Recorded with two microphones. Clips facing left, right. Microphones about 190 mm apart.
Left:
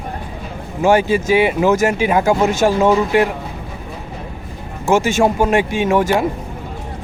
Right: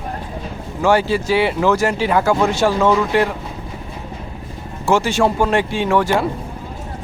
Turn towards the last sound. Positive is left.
turn(degrees=15)  # may be behind; listen again after turning